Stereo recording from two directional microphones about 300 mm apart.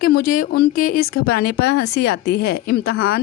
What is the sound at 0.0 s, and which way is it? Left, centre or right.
A woman's voice, left.